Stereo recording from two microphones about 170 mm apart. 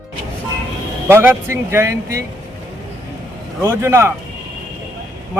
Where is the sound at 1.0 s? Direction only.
15° right (ahead or behind).